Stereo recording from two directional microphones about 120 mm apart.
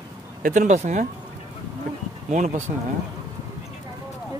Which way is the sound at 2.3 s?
90° right.